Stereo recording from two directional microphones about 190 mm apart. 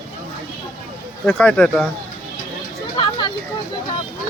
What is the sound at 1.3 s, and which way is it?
Speech, 5° left (ahead or behind).